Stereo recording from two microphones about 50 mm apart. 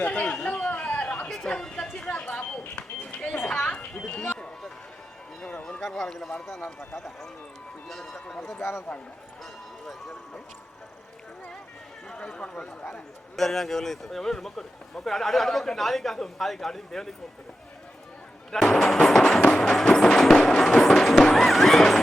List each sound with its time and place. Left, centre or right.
0.0 s chatter: left
1.5 s a sound: centre
5.8 s speech: centre
12.0 s speech: centre
13.3 s speech: centre
18.5 s speech: centre
19.8 s music: centre